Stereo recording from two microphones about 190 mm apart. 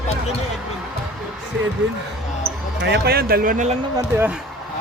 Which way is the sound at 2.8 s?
60° right (ahead or behind).